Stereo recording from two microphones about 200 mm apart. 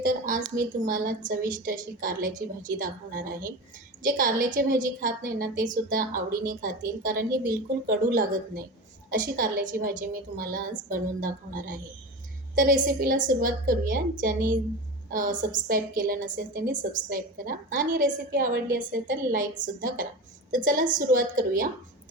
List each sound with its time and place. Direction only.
0.0 s a sound: 45° right (ahead or behind)
0.8 s a woman's voice: 45° right (ahead or behind)
20.5 s a woman's voice: 45° right (ahead or behind)